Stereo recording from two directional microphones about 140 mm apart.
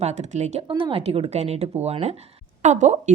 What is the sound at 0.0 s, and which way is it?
Speech, 55° right (ahead or behind).